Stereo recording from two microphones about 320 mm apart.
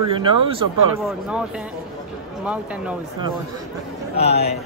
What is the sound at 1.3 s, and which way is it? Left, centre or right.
Speech, centre.